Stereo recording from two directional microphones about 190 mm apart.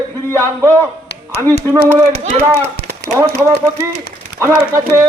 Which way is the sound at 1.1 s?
60° left (ahead or behind).